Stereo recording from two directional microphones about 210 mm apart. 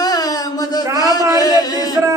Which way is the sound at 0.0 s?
15° left (ahead or behind).